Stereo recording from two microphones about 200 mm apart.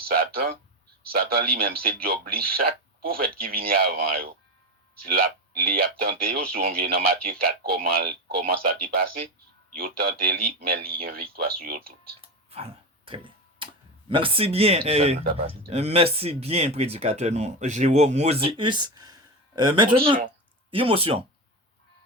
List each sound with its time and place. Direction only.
0.0 s speech: 50° right (ahead or behind)
12.2 s a sound: 30° right (ahead or behind)
13.1 s tick-tock: 25° right (ahead or behind)
14.1 s speech: 25° right (ahead or behind)